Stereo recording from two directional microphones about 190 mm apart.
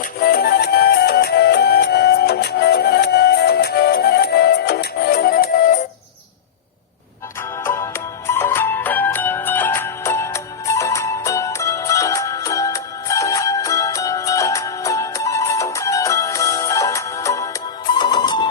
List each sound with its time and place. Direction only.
0.2 s music: 50° left (ahead or behind)
7.6 s music: 15° left (ahead or behind)